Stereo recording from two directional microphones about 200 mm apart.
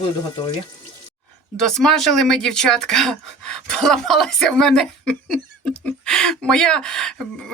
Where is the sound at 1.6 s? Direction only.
Centre (ahead or behind).